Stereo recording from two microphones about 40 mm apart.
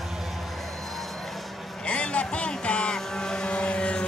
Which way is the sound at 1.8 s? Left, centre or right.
Left.